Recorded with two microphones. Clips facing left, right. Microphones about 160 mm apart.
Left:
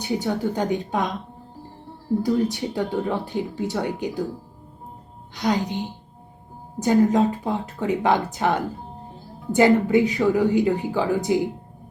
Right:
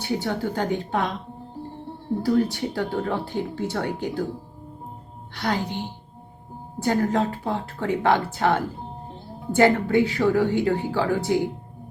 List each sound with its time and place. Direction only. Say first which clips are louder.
0.0 s speech: left 2 dB; 15° left (ahead or behind)
2.2 s speech: right 3 dB; 20° left (ahead or behind)
5.3 s speech: left 3 dB; 15° left (ahead or behind)